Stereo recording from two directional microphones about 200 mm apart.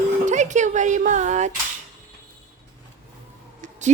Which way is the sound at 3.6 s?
35° right (ahead or behind).